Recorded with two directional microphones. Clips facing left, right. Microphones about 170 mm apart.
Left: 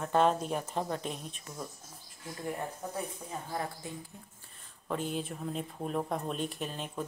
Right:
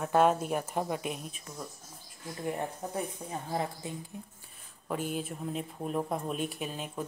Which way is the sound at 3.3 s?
20° right (ahead or behind).